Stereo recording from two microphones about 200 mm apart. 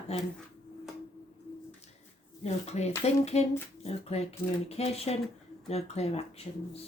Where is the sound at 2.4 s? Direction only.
30° left (ahead or behind).